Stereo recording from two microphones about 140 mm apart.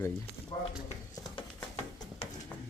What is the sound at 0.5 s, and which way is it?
Speech, 35° left (ahead or behind).